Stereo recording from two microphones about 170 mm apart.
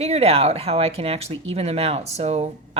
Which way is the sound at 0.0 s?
40° right (ahead or behind).